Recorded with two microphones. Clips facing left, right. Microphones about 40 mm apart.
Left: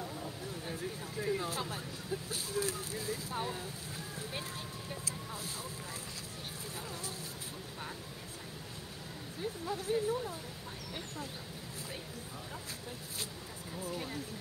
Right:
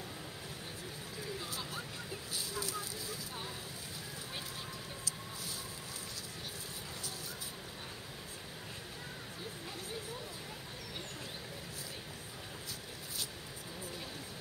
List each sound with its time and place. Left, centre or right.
1.2 s speech: left
5.0 s speech: left
9.7 s speech: left
13.8 s speech: left